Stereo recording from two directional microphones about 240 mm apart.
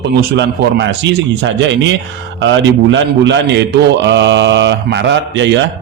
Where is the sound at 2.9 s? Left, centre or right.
Right.